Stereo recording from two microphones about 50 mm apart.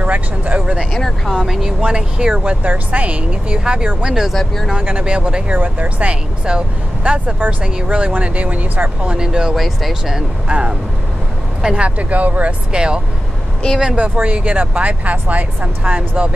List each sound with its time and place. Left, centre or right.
0.0 s a sound: right
0.9 s speech: centre
1.3 s speech: centre
1.8 s speech: right
2.6 s speech: right
4.1 s speech: centre
4.8 s speech: right
9.6 s speech: centre
10.1 s speech: centre
12.0 s speech: right
12.7 s speech: centre
13.9 s speech: right